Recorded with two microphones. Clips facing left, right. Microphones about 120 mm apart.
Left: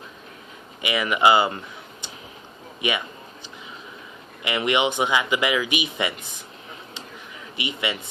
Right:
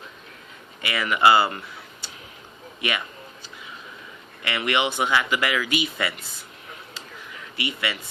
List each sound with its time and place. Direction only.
0.8 s speech: 15° left (ahead or behind)
4.4 s speech: 20° left (ahead or behind)
7.5 s speech: 20° left (ahead or behind)